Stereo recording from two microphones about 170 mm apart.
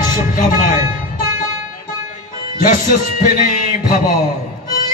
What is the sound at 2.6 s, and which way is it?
Speech, 50° left (ahead or behind).